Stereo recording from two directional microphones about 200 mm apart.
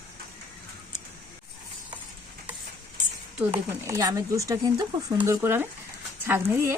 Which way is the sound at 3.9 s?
15° right (ahead or behind).